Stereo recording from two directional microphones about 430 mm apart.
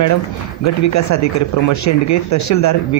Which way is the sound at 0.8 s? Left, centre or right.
Left.